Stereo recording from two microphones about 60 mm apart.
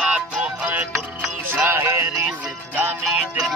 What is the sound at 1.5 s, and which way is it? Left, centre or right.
Music, right.